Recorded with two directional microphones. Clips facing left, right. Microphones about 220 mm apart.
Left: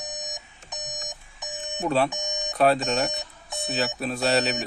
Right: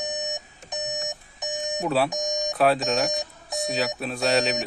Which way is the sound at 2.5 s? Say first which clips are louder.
Left 1 dB; centre (ahead or behind).